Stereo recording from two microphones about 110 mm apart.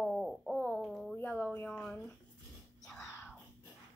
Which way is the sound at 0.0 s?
Centre (ahead or behind).